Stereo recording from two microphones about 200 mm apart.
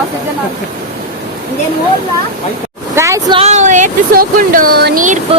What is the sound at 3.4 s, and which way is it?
Speech, 35° right (ahead or behind).